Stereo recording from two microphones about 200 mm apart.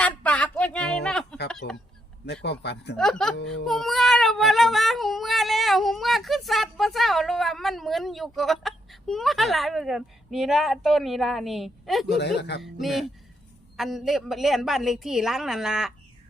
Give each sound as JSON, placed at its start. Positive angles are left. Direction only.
{"t": 0.0, "sound": "a sound", "side_deg": 5}
{"t": 1.6, "sound": "speech", "side_deg": 55}
{"t": 3.0, "sound": "child singing", "side_deg": 5}
{"t": 12.0, "sound": "speech", "side_deg": 55}
{"t": 12.6, "sound": "child singing", "side_deg": 0}